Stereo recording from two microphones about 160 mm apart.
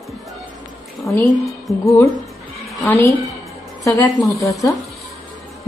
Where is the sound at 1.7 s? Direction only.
20° left (ahead or behind).